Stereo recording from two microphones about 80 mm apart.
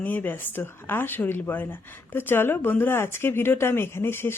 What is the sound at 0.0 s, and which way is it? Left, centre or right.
Speech, left.